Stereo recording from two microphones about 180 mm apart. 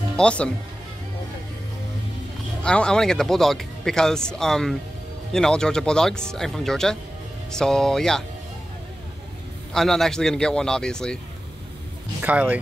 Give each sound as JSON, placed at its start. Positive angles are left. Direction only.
{"t": 0.2, "sound": "speech", "side_deg": 5}
{"t": 2.6, "sound": "speech", "side_deg": 5}
{"t": 9.8, "sound": "speech", "side_deg": 0}
{"t": 12.2, "sound": "speech", "side_deg": -10}